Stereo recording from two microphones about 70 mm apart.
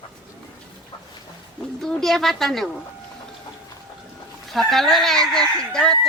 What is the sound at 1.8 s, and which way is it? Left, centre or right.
Speech, centre.